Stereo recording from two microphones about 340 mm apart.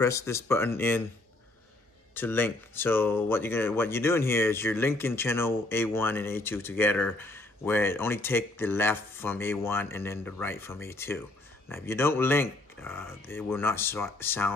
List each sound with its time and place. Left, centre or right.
0.0 s speech: centre
2.1 s speech: centre